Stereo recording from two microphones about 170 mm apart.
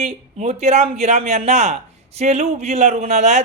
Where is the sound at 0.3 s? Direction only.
40° right (ahead or behind).